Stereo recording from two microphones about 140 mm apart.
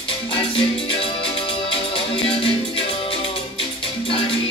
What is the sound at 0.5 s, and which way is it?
Music, 40° left (ahead or behind).